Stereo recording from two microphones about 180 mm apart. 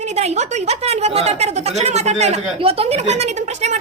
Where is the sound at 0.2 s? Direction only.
35° right (ahead or behind).